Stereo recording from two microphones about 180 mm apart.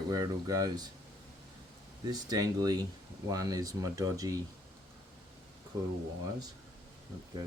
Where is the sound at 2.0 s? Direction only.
20° right (ahead or behind).